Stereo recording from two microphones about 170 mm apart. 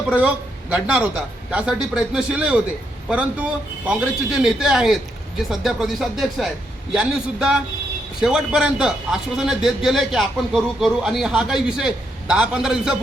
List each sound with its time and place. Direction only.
0.1 s a man's voice: 5° right (ahead or behind)